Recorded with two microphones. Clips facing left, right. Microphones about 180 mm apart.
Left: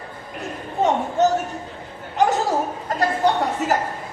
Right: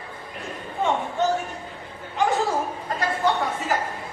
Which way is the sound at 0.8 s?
40° left (ahead or behind).